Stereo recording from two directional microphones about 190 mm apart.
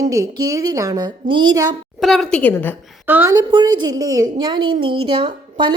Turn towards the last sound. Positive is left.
turn(degrees=-30)  # may be behind; listen again after turning